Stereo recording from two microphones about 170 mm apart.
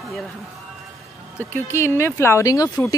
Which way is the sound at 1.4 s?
15° left (ahead or behind).